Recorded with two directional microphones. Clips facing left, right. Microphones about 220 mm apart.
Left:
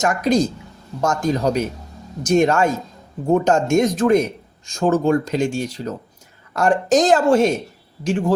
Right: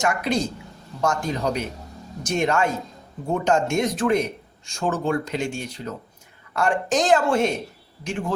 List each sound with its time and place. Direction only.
0.0 s speech: 40° left (ahead or behind)